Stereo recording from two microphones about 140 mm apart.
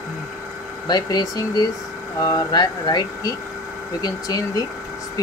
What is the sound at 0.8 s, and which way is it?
Speech, 30° left (ahead or behind).